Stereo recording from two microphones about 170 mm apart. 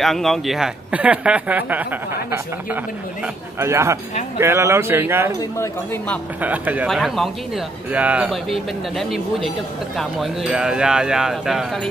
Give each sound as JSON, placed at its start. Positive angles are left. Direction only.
{"t": 0.0, "sound": "speech", "side_deg": 0}
{"t": 5.4, "sound": "speech", "side_deg": 15}
{"t": 6.4, "sound": "speech", "side_deg": -10}